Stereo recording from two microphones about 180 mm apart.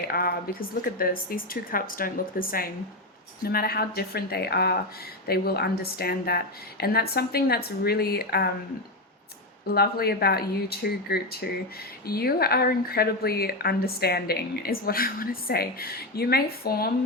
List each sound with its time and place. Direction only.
0.1 s a woman's voice: 55° left (ahead or behind)
9.6 s speech: 60° left (ahead or behind)